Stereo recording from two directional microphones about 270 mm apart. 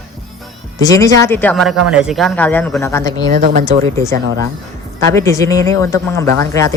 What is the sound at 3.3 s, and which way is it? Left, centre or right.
Speech, right.